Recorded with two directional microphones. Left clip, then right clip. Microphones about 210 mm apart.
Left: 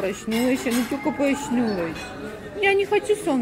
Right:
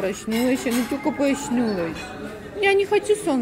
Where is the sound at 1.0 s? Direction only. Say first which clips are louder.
Right 1 dB; 15° right (ahead or behind).